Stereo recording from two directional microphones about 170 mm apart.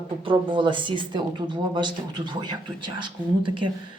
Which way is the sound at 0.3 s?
30° right (ahead or behind).